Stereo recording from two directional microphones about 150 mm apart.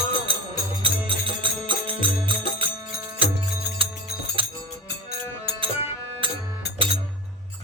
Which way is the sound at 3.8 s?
35° right (ahead or behind).